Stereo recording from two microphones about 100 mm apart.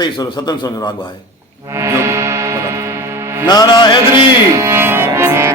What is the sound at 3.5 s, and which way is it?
Music, 45° left (ahead or behind).